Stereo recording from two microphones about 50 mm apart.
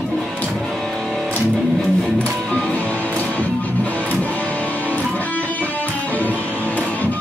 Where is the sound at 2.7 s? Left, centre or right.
Left.